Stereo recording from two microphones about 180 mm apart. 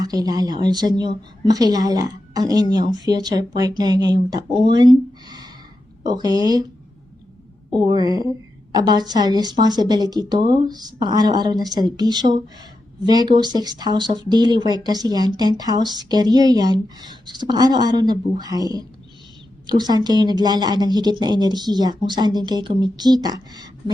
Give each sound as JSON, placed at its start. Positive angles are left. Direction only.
{"t": 0.0, "sound": "speech", "side_deg": -20}
{"t": 7.8, "sound": "a woman's voice", "side_deg": -20}